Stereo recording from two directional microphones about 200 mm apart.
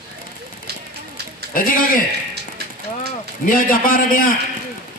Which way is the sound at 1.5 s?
45° left (ahead or behind).